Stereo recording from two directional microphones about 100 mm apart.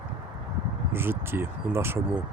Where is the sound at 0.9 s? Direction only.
25° right (ahead or behind).